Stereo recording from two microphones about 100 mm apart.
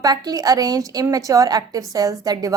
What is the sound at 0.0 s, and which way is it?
A woman's voice, 40° right (ahead or behind).